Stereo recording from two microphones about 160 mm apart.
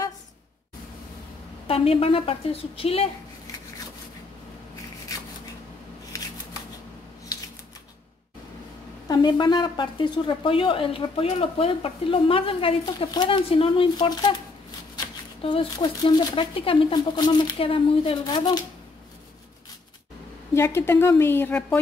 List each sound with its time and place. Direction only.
1.7 s a woman's voice: 35° left (ahead or behind)
6.1 s shuffling cards: 20° left (ahead or behind)
9.0 s a woman's voice: 25° left (ahead or behind)
15.4 s speech: 30° left (ahead or behind)
20.5 s a woman's voice: 15° left (ahead or behind)